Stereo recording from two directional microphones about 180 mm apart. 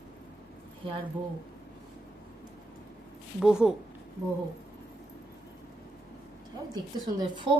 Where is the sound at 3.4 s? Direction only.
5° right (ahead or behind).